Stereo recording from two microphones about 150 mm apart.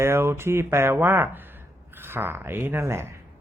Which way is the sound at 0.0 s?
15° right (ahead or behind).